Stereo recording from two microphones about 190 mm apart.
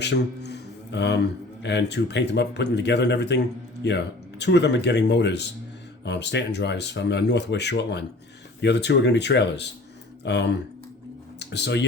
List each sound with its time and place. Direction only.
0.0 s a man's voice: 65° left (ahead or behind)